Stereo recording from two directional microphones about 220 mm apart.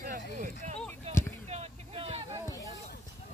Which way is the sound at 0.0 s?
40° right (ahead or behind).